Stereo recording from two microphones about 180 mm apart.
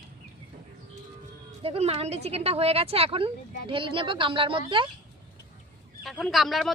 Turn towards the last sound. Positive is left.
turn(degrees=0)  # may be behind; listen again after turning